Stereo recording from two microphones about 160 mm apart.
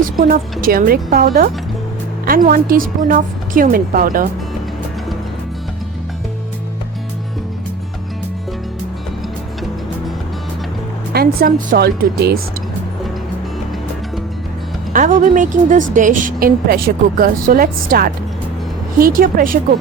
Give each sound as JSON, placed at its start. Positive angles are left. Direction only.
{"t": 0.0, "sound": "a woman's voice", "side_deg": -60}
{"t": 11.1, "sound": "speech", "side_deg": -75}
{"t": 14.9, "sound": "a woman's voice", "side_deg": -55}